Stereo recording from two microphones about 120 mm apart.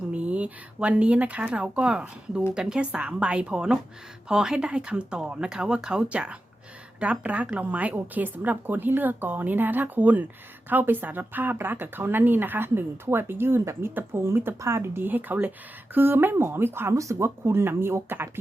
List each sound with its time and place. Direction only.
0.1 s speech: 10° right (ahead or behind)